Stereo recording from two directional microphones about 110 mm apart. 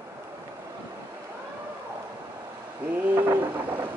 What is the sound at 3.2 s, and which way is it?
Pigeon, 15° right (ahead or behind).